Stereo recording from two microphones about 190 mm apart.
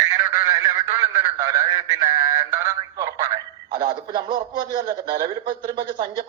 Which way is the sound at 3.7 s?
20° right (ahead or behind).